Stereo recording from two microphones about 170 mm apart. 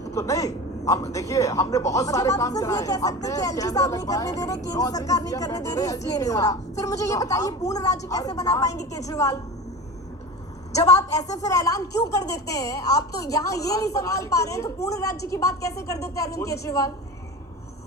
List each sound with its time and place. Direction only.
0.1 s a man's voice: 20° left (ahead or behind)
10.8 s a man's voice: 20° left (ahead or behind)